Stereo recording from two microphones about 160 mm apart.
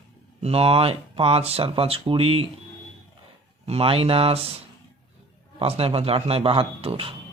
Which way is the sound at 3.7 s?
35° right (ahead or behind).